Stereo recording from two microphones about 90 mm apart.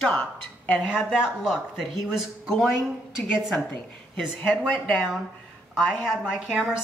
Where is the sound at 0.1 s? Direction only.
15° left (ahead or behind).